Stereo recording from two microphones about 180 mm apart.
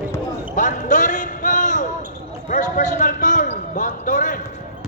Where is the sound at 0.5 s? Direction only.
45° left (ahead or behind).